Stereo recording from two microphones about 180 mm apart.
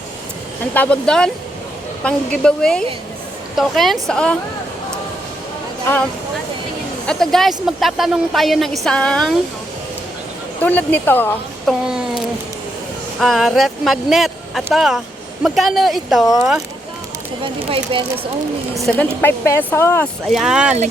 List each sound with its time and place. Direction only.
0.6 s a woman's voice: 10° left (ahead or behind)
5.9 s speech: 10° left (ahead or behind)
7.1 s a woman's voice: centre (ahead or behind)
10.6 s speech: 10° left (ahead or behind)
11.9 s a sound: 5° right (ahead or behind)
13.1 s a woman's voice: centre (ahead or behind)
17.4 s speech: 30° right (ahead or behind)
18.9 s speech: 10° left (ahead or behind)
20.3 s a woman's voice: 5° right (ahead or behind)